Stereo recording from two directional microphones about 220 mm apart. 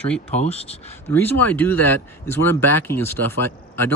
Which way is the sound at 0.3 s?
30° left (ahead or behind).